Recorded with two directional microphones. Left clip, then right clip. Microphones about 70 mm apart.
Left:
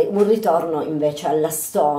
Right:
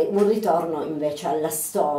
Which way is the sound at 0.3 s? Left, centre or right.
Left.